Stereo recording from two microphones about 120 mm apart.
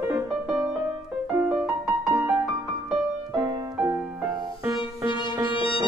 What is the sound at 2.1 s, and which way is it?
Music, 15° right (ahead or behind).